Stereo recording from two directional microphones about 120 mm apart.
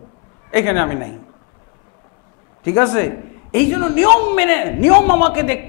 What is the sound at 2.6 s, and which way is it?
A man's voice, 25° left (ahead or behind).